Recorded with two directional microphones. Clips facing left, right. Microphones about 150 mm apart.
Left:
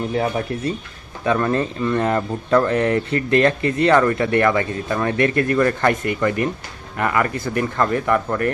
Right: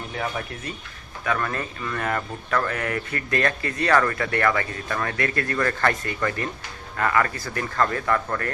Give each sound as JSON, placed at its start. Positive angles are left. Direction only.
{"t": 0.2, "sound": "speech", "side_deg": 30}